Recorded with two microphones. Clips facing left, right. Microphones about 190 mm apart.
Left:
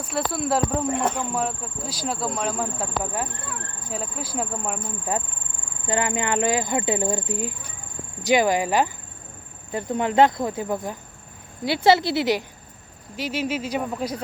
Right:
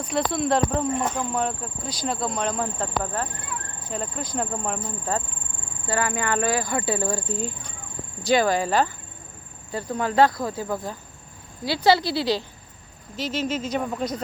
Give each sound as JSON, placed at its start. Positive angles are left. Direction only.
{"t": 0.0, "sound": "speech", "side_deg": 5}
{"t": 1.3, "sound": "speech", "side_deg": -5}
{"t": 5.9, "sound": "speech", "side_deg": 20}